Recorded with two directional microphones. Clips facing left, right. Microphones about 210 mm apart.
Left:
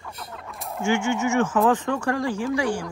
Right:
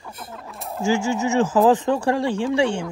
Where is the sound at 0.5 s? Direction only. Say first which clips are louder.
Right 2 dB; centre (ahead or behind).